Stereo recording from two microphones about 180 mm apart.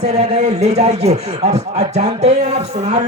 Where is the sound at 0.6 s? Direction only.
35° right (ahead or behind).